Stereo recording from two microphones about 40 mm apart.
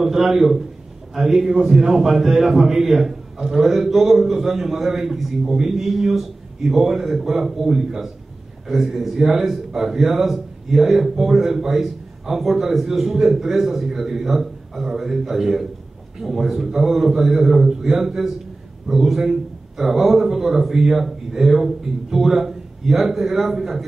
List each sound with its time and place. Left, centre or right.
0.0 s a man's voice: centre
3.6 s speech: centre